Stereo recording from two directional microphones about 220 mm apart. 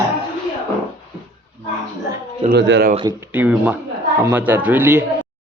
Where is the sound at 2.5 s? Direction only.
50° right (ahead or behind).